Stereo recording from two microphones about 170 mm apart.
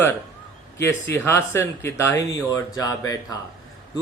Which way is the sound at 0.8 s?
15° left (ahead or behind).